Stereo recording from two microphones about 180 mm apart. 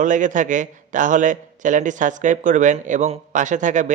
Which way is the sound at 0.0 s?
45° right (ahead or behind).